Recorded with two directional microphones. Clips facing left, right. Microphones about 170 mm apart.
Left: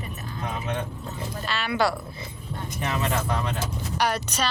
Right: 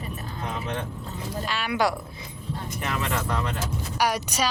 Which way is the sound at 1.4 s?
10° right (ahead or behind).